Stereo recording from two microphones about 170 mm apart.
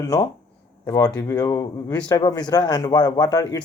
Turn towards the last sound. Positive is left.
turn(degrees=20)  # may be behind; listen again after turning